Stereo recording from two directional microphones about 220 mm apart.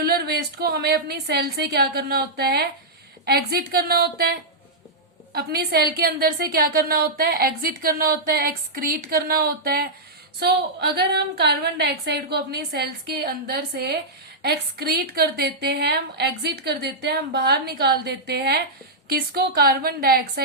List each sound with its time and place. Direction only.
0.0 s a woman's voice: 45° right (ahead or behind)